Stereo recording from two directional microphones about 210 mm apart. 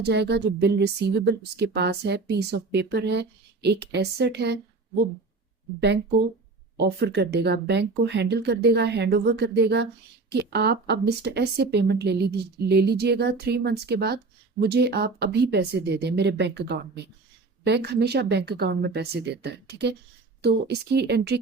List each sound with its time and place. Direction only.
0.0 s a woman's voice: 55° right (ahead or behind)
6.7 s a woman's voice: 50° right (ahead or behind)